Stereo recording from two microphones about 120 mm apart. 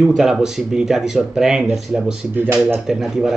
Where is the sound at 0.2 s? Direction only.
5° right (ahead or behind).